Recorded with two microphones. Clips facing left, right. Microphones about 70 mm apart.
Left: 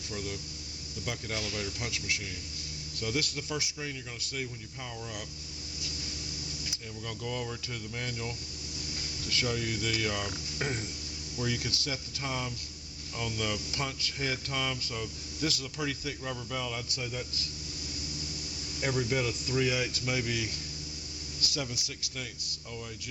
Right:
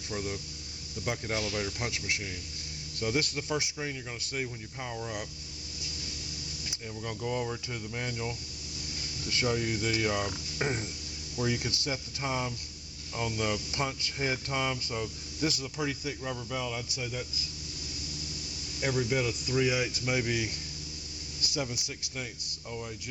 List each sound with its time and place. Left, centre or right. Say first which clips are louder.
0.1 s speech: right 3 dB; right
7.0 s speech: right 4 dB; right; by 17.4 s centre
18.8 s speech: right 1 dB; centre; by 22.8 s right